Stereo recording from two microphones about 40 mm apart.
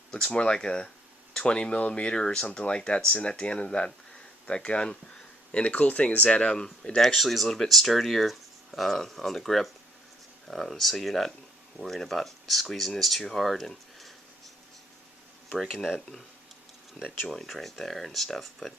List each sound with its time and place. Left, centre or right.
0.3 s speech: left
2.1 s speech: centre
5.6 s speech: left
7.0 s speech: centre
15.4 s speech: centre
17.0 s speech: centre
17.3 s speech: centre